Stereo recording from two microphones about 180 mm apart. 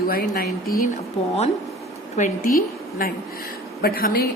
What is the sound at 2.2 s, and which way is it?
A woman's voice, 45° left (ahead or behind).